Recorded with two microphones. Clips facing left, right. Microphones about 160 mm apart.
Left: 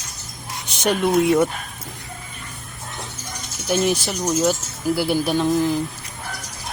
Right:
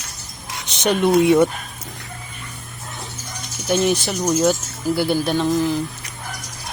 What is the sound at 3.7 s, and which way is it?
Speech, centre (ahead or behind).